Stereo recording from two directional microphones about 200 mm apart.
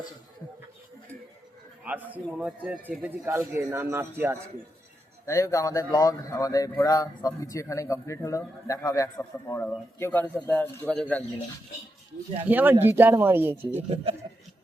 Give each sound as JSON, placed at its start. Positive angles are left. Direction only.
{"t": 1.8, "sound": "a man's voice", "side_deg": -5}
{"t": 5.2, "sound": "a man's voice", "side_deg": 15}
{"t": 12.5, "sound": "a man's voice", "side_deg": -10}
{"t": 13.7, "sound": "speech", "side_deg": -30}